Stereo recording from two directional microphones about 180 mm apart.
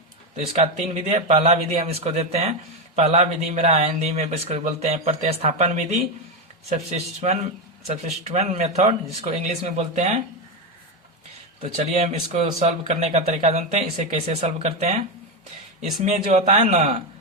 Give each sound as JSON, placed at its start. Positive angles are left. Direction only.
{"t": 0.5, "sound": "speech", "side_deg": -35}
{"t": 11.8, "sound": "speech", "side_deg": -35}